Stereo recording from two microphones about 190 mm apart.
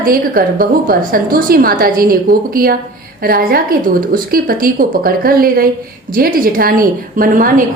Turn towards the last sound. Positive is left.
turn(degrees=-45)  # may be behind; listen again after turning